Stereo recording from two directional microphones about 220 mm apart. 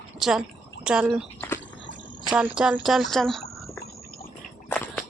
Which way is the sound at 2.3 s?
5° right (ahead or behind).